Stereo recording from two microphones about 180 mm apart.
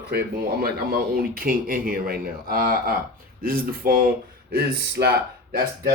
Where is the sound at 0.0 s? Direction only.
60° right (ahead or behind).